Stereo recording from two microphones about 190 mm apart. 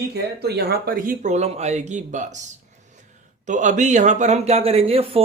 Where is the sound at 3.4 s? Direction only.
40° right (ahead or behind).